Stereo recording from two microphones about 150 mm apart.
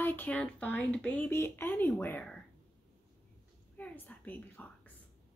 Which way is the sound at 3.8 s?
10° left (ahead or behind).